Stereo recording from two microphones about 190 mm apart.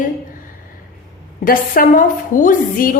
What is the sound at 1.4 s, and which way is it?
A woman's voice, 50° left (ahead or behind).